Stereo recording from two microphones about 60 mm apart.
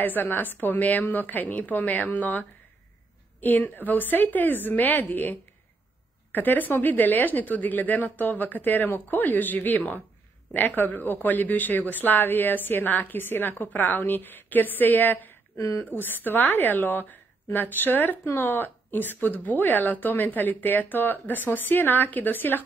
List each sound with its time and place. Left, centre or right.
0.0 s a woman's voice: left
6.3 s a woman's voice: left